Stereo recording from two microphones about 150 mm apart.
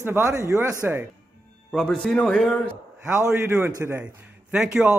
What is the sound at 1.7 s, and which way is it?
Speech, 5° left (ahead or behind).